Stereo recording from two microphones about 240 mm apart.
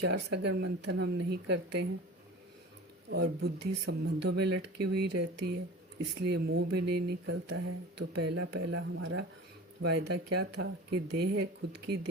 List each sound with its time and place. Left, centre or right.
0.1 s speech: right
3.1 s speech: right